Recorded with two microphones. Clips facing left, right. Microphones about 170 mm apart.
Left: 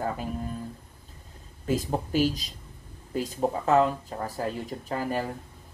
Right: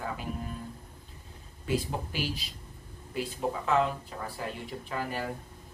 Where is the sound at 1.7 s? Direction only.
45° left (ahead or behind).